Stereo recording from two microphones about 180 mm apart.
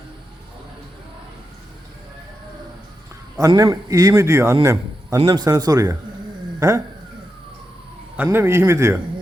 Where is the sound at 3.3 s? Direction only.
20° right (ahead or behind).